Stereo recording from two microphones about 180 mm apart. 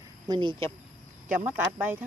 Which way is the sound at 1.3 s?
10° right (ahead or behind).